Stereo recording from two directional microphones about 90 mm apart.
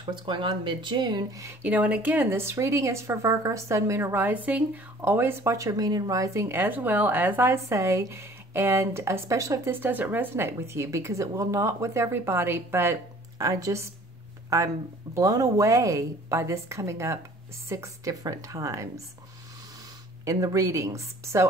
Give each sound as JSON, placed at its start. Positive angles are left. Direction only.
{"t": 0.0, "sound": "speech", "side_deg": -60}
{"t": 1.6, "sound": "a woman's voice", "side_deg": -15}
{"t": 6.5, "sound": "speech", "side_deg": -20}
{"t": 13.4, "sound": "a woman's voice", "side_deg": -40}
{"t": 20.2, "sound": "a woman's voice", "side_deg": -40}